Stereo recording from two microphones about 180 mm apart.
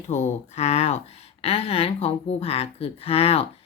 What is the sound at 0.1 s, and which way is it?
Speech, 40° left (ahead or behind).